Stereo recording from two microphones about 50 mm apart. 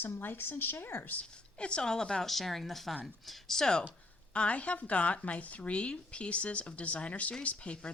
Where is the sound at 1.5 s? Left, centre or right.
Left.